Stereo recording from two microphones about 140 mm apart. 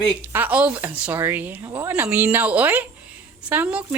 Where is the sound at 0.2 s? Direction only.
15° right (ahead or behind).